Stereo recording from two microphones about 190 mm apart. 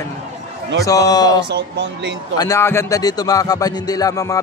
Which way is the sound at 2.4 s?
15° left (ahead or behind).